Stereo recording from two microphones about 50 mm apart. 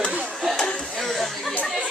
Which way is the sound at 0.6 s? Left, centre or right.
Centre.